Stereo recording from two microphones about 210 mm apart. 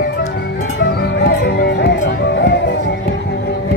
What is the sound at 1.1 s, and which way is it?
Music, 55° left (ahead or behind).